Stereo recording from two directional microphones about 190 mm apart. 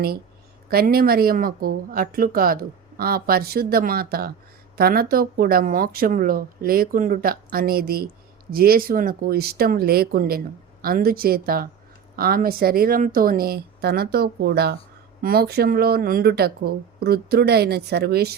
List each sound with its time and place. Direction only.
0.7 s speech: 55° right (ahead or behind)